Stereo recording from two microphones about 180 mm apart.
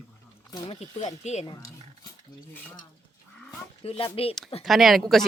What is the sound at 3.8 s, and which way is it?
Speech, 35° left (ahead or behind).